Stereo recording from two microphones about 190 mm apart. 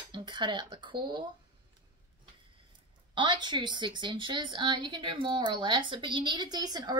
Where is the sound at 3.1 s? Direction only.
25° right (ahead or behind).